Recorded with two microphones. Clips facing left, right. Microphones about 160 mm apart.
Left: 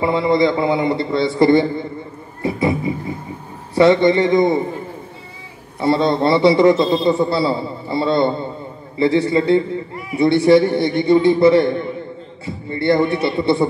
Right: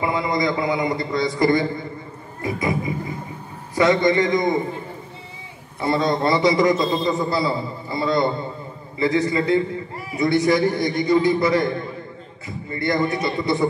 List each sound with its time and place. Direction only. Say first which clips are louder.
0.0 s a man's voice: left 6 dB; 30° left (ahead or behind)
2.4 s music: left 5 dB; 30° left (ahead or behind)
3.7 s a man's voice: left 5 dB; 30° left (ahead or behind)
5.8 s a man's voice: left 4 dB; 30° left (ahead or behind)